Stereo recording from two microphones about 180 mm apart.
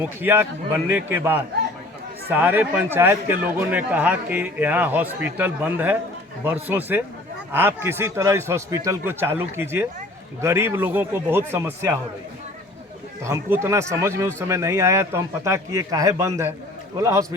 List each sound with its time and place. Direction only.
0.0 s a man's voice: 10° right (ahead or behind)
13.2 s a man's voice: 15° right (ahead or behind)